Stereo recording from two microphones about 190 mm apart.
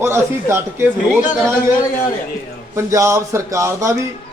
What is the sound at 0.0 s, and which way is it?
A man's voice, 15° right (ahead or behind).